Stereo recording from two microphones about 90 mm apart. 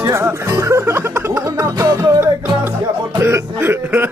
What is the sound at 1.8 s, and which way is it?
Music, 35° right (ahead or behind).